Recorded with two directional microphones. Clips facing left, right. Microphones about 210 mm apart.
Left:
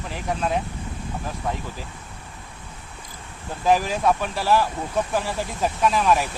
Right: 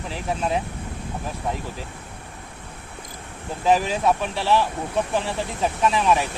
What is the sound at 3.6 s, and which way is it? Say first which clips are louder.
Speech: even; centre (ahead or behind).